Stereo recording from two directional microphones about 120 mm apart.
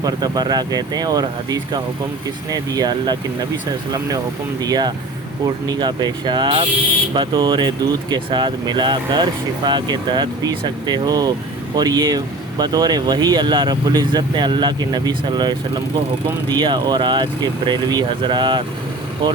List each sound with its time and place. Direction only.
0.0 s speech: 35° right (ahead or behind)
4.6 s speech: 35° right (ahead or behind)